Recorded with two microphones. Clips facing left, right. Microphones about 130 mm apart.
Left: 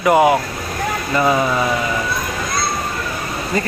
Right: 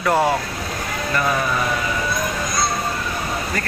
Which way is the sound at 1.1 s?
25° left (ahead or behind).